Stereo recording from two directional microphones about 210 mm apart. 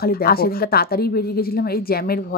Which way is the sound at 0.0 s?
45° left (ahead or behind).